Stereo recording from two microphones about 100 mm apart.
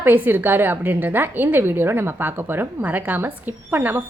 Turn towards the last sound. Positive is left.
turn(degrees=-20)  # may be behind; listen again after turning